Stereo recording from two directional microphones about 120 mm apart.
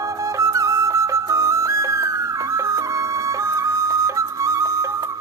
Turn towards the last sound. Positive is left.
turn(degrees=-25)  # may be behind; listen again after turning